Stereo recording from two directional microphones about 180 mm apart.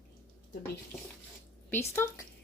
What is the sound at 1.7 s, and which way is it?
Speech, 10° left (ahead or behind).